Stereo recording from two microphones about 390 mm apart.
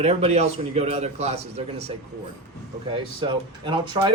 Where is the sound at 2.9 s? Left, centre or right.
Centre.